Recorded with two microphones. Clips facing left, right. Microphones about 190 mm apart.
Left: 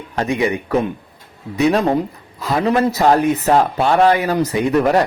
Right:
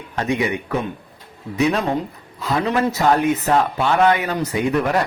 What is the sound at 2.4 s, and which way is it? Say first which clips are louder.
Speech: left 3 dB; 40° left (ahead or behind).